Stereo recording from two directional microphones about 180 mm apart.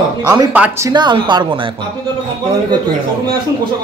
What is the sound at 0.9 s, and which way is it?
Speech, 25° right (ahead or behind).